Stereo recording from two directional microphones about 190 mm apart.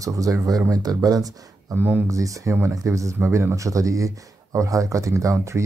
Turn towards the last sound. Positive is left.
turn(degrees=-15)  # may be behind; listen again after turning